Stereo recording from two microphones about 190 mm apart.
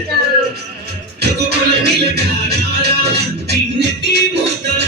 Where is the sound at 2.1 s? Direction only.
60° right (ahead or behind).